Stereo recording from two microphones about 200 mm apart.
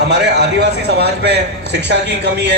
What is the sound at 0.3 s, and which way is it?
A man's voice, 55° right (ahead or behind).